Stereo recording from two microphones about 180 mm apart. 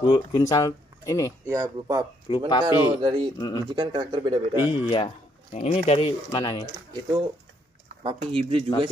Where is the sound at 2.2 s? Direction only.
25° left (ahead or behind).